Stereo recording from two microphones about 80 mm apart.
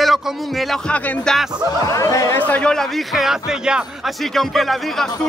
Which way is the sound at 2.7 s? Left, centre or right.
Centre.